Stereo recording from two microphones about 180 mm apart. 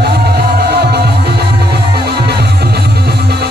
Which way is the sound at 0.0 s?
65° right (ahead or behind).